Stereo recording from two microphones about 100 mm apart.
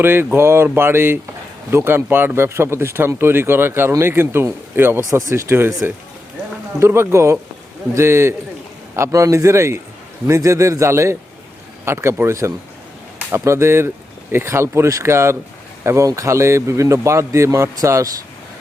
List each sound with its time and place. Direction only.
0.0 s a man's voice: 20° right (ahead or behind)